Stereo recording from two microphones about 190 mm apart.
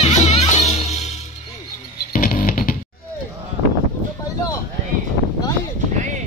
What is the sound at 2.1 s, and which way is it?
Music, 45° left (ahead or behind).